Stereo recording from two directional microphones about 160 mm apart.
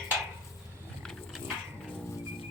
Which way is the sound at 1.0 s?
Centre (ahead or behind).